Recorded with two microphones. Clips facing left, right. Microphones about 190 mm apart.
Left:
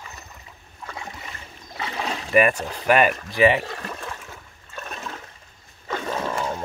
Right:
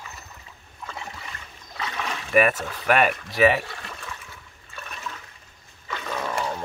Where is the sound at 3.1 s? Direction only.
40° left (ahead or behind).